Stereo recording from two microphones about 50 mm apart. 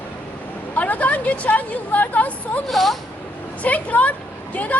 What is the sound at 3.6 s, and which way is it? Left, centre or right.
A woman's voice, left.